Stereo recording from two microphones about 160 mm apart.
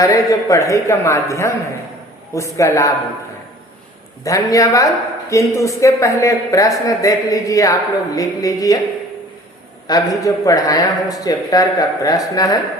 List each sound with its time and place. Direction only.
0.0 s speech: 20° left (ahead or behind)
4.2 s speech: 20° left (ahead or behind)
9.8 s speech: 25° left (ahead or behind)